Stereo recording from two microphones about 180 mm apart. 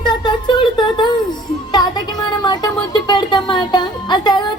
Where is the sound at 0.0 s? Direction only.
25° left (ahead or behind).